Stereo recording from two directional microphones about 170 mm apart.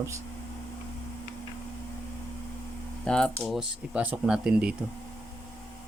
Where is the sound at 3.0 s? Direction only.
5° left (ahead or behind).